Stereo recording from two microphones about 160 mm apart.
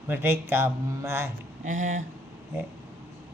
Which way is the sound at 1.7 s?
55° right (ahead or behind).